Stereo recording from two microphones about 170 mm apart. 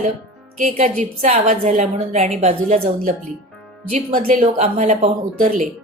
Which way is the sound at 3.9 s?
45° right (ahead or behind).